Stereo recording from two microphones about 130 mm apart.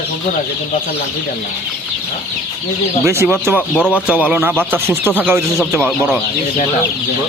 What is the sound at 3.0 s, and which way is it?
Speech, 20° right (ahead or behind).